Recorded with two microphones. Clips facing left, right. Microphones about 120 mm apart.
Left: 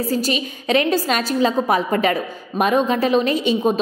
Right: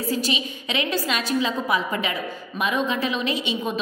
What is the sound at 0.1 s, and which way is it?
A woman's voice, 45° left (ahead or behind).